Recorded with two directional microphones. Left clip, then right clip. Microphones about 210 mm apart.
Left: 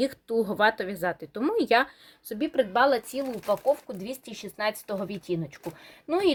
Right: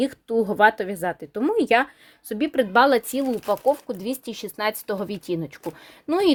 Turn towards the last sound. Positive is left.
turn(degrees=-50)  # may be behind; listen again after turning